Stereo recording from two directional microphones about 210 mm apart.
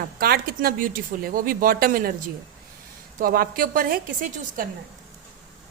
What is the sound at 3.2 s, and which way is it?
A woman's voice, 40° right (ahead or behind).